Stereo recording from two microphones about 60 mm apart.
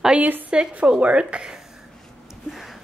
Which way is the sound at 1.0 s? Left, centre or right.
Centre.